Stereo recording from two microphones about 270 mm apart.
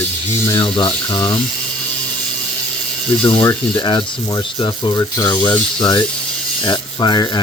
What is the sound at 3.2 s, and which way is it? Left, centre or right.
Speech, centre.